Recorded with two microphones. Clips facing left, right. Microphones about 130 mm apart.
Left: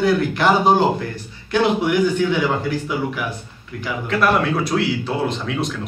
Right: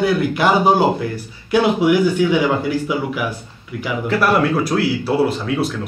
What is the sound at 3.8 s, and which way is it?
Speech, 5° right (ahead or behind).